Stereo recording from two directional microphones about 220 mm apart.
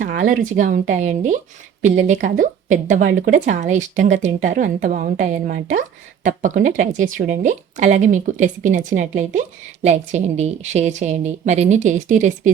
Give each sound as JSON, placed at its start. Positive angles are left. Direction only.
{"t": 0.0, "sound": "speech", "side_deg": -35}